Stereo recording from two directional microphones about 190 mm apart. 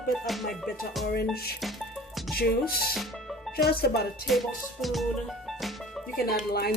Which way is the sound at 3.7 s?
55° left (ahead or behind).